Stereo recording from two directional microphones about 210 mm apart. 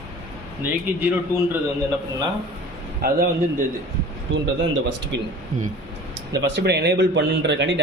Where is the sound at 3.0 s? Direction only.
45° right (ahead or behind).